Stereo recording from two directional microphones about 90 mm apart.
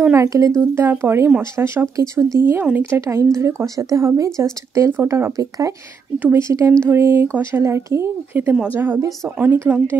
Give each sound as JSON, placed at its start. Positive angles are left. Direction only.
{"t": 0.1, "sound": "speech", "side_deg": -35}
{"t": 6.1, "sound": "speech", "side_deg": -20}
{"t": 6.4, "sound": "speech", "side_deg": -30}